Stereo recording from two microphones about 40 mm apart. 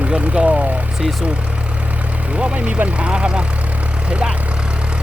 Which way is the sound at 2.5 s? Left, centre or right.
Right.